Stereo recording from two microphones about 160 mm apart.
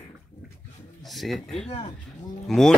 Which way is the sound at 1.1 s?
Centre (ahead or behind).